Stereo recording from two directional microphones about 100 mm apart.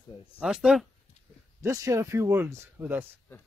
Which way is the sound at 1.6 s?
30° right (ahead or behind).